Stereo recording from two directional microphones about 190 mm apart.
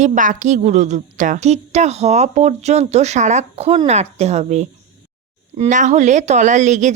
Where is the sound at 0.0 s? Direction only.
40° right (ahead or behind).